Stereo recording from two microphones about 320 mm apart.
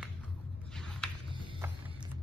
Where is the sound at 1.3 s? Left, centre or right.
Centre.